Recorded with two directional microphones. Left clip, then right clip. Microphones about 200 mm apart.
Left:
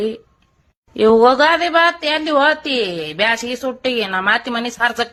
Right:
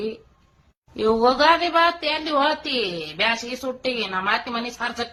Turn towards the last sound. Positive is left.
turn(degrees=40)  # may be behind; listen again after turning